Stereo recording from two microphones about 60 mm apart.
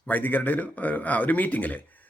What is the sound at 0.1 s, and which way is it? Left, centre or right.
Speech, left.